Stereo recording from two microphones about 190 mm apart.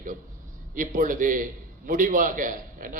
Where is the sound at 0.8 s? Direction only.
45° right (ahead or behind).